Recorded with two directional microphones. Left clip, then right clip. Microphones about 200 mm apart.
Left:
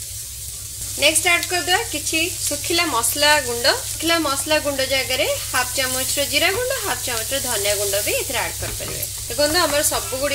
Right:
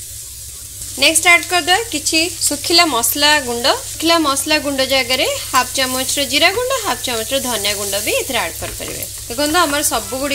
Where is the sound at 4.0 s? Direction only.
40° right (ahead or behind).